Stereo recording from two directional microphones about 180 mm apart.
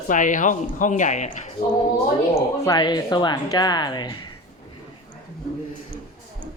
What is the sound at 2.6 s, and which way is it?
Speech, 20° left (ahead or behind).